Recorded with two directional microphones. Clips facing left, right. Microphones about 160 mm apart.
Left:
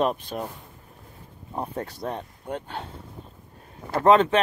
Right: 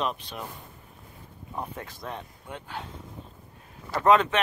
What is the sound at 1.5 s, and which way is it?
Speech, 35° left (ahead or behind).